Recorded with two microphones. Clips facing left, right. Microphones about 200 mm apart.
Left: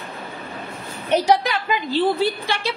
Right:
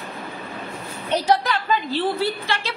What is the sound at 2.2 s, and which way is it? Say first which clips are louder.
Speech: left 2 dB; 15° left (ahead or behind).